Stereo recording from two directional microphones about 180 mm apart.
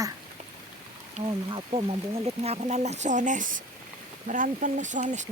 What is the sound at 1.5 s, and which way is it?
Speech, 30° right (ahead or behind).